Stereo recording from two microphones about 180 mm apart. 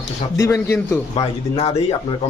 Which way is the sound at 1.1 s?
35° left (ahead or behind).